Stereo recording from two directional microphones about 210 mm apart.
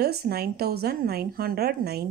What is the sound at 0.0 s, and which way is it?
A woman's voice, 50° right (ahead or behind).